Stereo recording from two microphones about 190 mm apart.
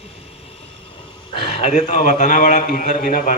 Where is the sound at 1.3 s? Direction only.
35° left (ahead or behind).